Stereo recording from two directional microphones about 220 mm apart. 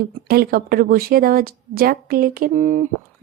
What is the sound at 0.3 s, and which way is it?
Speech, 45° right (ahead or behind).